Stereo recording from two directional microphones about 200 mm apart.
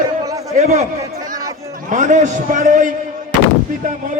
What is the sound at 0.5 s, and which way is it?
Speech, 35° right (ahead or behind).